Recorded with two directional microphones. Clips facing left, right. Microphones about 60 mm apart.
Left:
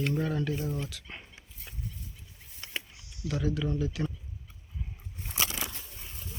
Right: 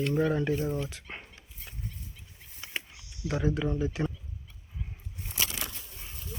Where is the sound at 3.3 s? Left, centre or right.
Right.